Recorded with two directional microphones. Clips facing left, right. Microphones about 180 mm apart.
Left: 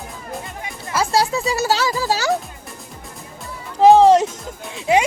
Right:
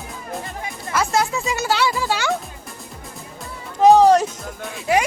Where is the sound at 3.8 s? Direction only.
25° left (ahead or behind).